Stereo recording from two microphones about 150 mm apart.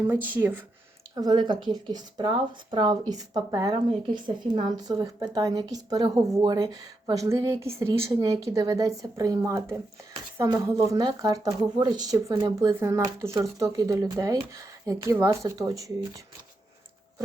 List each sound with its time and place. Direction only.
0.1 s speech: 15° right (ahead or behind)
1.1 s speech: 25° right (ahead or behind)